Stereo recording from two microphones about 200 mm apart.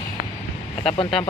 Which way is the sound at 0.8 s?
25° left (ahead or behind).